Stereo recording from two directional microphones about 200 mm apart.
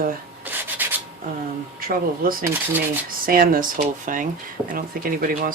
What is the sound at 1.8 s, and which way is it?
Speech, 45° right (ahead or behind).